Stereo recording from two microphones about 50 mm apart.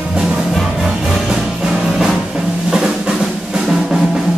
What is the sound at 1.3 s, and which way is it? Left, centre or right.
Music, centre.